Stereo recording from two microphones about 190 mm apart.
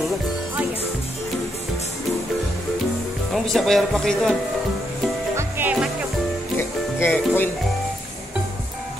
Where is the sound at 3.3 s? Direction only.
Centre (ahead or behind).